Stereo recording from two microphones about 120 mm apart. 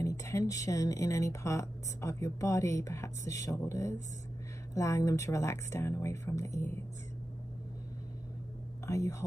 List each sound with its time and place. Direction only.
0.0 s speech: 25° left (ahead or behind)
8.8 s speech: 25° left (ahead or behind)